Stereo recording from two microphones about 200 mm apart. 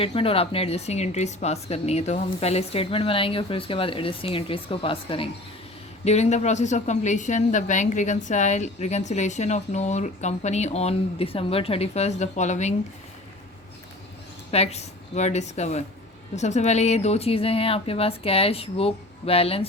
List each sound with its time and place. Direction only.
0.0 s a woman's voice: 25° left (ahead or behind)
14.5 s a woman's voice: 30° left (ahead or behind)